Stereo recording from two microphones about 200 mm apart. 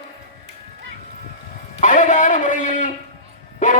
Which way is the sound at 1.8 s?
40° left (ahead or behind).